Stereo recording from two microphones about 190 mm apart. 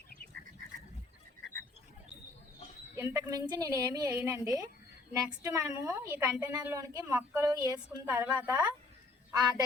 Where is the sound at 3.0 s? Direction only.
20° right (ahead or behind).